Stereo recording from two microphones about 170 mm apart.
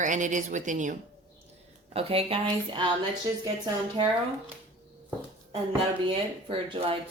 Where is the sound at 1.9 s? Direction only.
35° right (ahead or behind).